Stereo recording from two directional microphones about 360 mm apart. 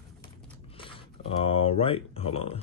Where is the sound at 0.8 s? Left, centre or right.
Centre.